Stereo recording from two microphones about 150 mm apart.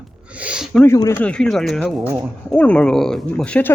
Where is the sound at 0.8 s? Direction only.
20° left (ahead or behind).